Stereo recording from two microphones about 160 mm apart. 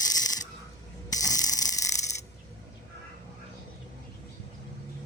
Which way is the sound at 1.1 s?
20° left (ahead or behind).